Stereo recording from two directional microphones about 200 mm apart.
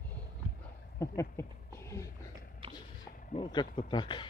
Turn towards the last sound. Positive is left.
turn(degrees=25)  # may be behind; listen again after turning